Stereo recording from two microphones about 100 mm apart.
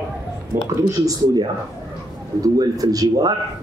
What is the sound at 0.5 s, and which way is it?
Speech, 30° right (ahead or behind).